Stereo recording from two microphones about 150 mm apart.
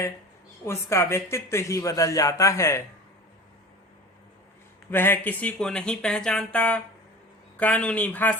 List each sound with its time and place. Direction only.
0.6 s speech: 20° left (ahead or behind)
4.9 s speech: 15° left (ahead or behind)